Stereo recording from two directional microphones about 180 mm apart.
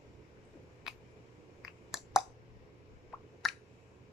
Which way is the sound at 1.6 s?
Centre (ahead or behind).